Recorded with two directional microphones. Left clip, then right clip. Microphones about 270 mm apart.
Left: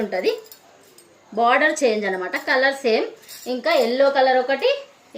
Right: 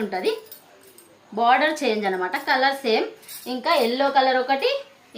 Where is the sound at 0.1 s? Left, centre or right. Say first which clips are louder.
Left 3 dB; centre.